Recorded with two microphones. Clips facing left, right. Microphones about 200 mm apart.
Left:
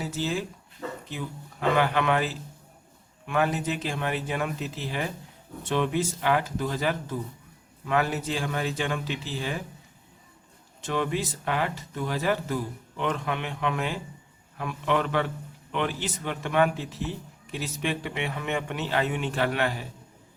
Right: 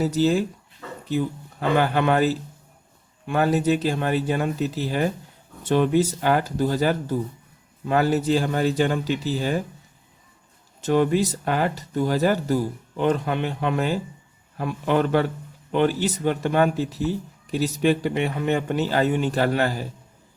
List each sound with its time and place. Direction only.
0.0 s speech: 40° right (ahead or behind)
10.8 s speech: 40° right (ahead or behind)